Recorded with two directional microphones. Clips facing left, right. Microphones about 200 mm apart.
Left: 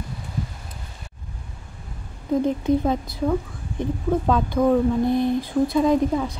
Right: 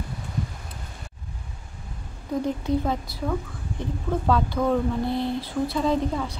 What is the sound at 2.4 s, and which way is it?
Speech, 20° left (ahead or behind).